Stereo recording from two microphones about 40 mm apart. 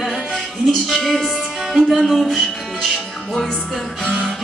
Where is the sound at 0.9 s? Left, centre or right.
Centre.